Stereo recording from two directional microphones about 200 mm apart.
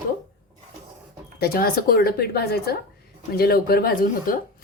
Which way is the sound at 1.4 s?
50° left (ahead or behind).